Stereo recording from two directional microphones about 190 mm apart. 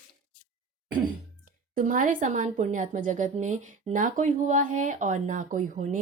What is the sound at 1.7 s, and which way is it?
A woman's voice, 45° right (ahead or behind).